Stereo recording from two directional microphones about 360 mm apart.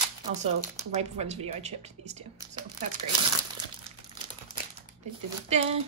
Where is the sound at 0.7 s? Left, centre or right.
Centre.